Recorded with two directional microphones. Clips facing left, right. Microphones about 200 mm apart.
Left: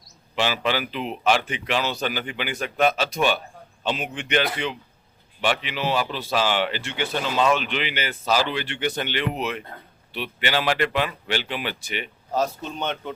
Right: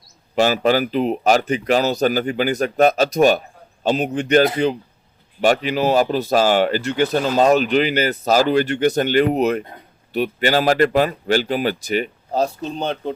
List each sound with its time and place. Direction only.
0.3 s speech: 45° right (ahead or behind)